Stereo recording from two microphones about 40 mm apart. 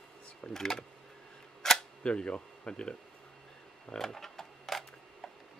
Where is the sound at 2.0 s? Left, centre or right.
Left.